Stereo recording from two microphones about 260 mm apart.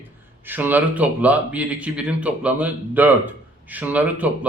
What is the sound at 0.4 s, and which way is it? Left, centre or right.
Speech, centre.